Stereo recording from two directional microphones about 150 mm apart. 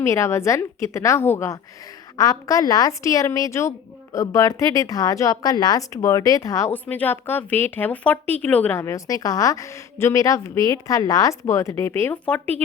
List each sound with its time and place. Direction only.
0.0 s a woman's voice: 20° left (ahead or behind)